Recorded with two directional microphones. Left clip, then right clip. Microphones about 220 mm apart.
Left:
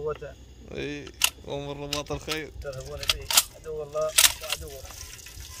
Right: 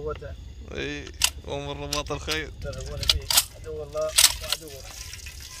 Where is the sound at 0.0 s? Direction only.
10° left (ahead or behind).